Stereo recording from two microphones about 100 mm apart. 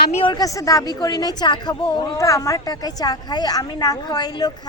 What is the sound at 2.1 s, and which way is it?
A woman's voice, 35° left (ahead or behind).